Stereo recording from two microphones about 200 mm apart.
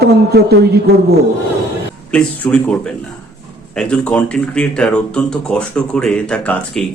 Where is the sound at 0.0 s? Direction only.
55° right (ahead or behind).